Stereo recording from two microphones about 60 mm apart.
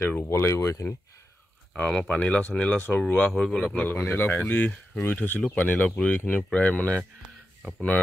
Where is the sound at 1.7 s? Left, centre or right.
Centre.